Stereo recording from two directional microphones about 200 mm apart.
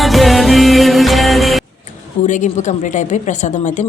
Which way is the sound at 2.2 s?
35° left (ahead or behind).